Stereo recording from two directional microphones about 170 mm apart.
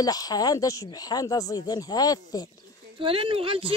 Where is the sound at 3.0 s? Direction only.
30° right (ahead or behind).